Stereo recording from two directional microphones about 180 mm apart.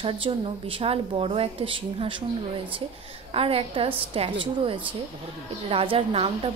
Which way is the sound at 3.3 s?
30° right (ahead or behind).